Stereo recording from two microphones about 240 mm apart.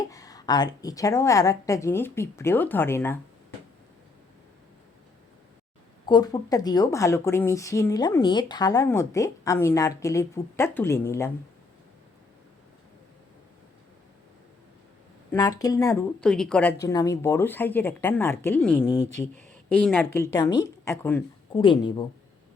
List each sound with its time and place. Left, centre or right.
0.0 s a woman's voice: centre
6.1 s a woman's voice: centre
15.3 s a woman's voice: centre
16.2 s a woman's voice: centre
16.8 s a woman's voice: centre
21.5 s a woman's voice: left